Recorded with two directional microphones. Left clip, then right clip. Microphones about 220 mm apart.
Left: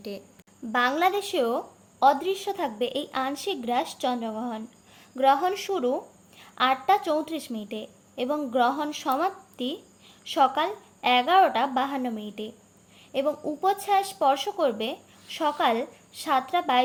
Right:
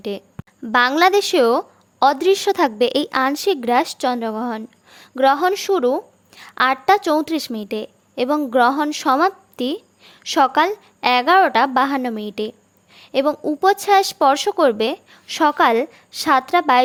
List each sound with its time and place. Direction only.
0.7 s a woman's voice: 50° right (ahead or behind)